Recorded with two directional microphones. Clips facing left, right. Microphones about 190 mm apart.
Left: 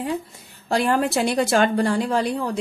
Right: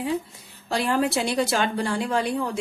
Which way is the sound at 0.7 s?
50° left (ahead or behind).